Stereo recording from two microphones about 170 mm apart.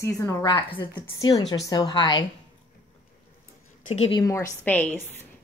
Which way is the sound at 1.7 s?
25° left (ahead or behind).